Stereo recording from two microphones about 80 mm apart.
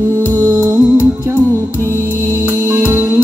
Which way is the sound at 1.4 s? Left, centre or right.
Left.